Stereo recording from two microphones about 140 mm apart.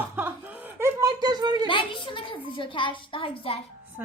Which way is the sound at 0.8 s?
20° right (ahead or behind).